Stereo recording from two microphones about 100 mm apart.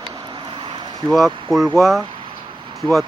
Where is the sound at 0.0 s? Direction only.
50° right (ahead or behind).